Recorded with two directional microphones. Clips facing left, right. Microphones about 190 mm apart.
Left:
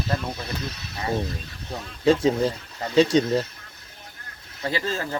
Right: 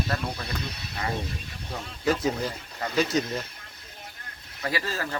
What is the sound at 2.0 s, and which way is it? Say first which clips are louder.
Speech: left 7 dB; 30° left (ahead or behind).